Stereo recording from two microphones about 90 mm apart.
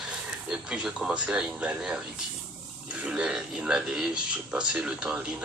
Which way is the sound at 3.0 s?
10° right (ahead or behind).